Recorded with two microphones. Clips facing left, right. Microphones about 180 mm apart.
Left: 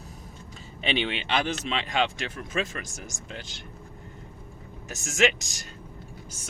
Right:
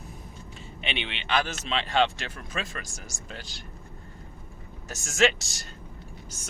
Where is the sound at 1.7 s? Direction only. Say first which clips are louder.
Right 5 dB; 10° left (ahead or behind).